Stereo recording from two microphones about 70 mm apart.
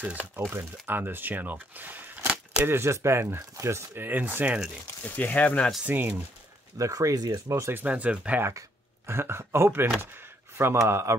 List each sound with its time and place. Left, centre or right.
0.5 s speech: right
2.6 s speech: right
5.0 s speech: left
5.9 s speech: right
6.8 s speech: right
7.4 s speech: right
7.7 s speech: right
8.5 s speech: right